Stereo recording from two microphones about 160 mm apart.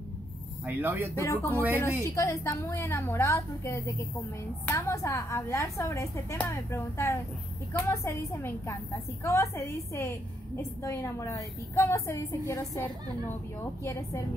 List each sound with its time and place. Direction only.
0.7 s speech: 10° right (ahead or behind)
1.1 s a woman's voice: 15° left (ahead or behind)